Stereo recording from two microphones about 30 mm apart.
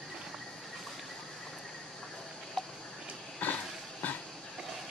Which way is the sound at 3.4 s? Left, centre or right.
Left.